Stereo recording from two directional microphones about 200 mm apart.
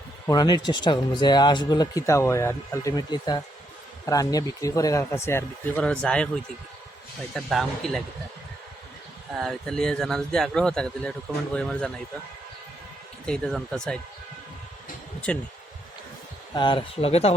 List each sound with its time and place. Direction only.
0.3 s speech: 20° left (ahead or behind)
7.3 s speech: centre (ahead or behind)
9.4 s speech: centre (ahead or behind)
13.2 s speech: 5° left (ahead or behind)
15.3 s speech: 5° left (ahead or behind)
16.6 s speech: 25° left (ahead or behind)